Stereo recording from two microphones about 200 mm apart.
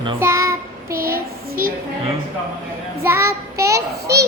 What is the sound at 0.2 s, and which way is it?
Child singing, 15° right (ahead or behind).